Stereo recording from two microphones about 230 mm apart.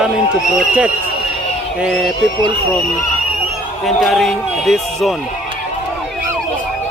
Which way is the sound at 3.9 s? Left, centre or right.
Centre.